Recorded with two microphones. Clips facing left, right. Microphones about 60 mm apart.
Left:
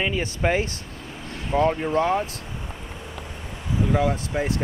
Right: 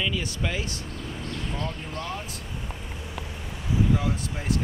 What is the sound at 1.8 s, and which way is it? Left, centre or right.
Speech, left.